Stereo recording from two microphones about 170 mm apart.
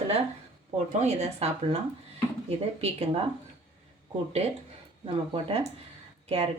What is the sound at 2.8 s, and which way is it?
Speech, 35° right (ahead or behind).